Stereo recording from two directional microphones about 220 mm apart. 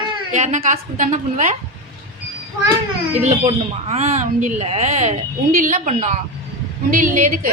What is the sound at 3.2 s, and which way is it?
Speech, 30° right (ahead or behind).